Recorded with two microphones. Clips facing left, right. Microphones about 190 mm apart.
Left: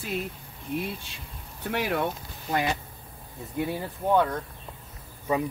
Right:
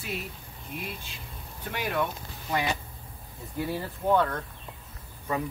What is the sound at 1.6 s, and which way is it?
Speech, 70° left (ahead or behind).